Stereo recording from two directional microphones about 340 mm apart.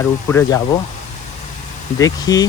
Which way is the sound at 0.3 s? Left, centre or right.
Centre.